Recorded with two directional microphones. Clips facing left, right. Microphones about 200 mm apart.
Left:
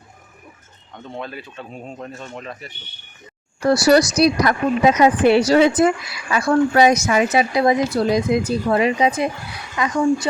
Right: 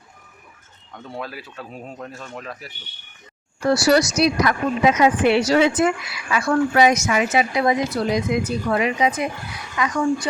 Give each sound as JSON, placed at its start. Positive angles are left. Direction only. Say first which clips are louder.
{"t": 1.0, "sound": "speech", "louder": "left 1 dB", "side_deg": -5}
{"t": 3.6, "sound": "a woman's voice", "louder": "left 3 dB", "side_deg": 40}